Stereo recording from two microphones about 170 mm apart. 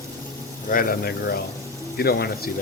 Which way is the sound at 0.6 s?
60° left (ahead or behind).